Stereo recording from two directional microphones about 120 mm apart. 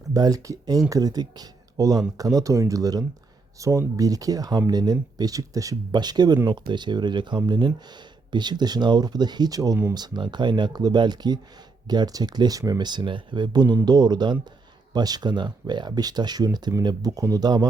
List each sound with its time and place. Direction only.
0.1 s speech: 30° right (ahead or behind)